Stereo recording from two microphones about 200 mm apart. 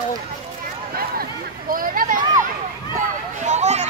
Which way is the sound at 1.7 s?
45° right (ahead or behind).